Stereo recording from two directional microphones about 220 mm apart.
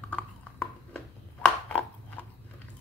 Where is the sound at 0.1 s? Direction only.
5° left (ahead or behind).